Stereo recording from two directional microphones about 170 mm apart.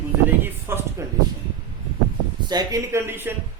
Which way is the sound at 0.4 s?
15° right (ahead or behind).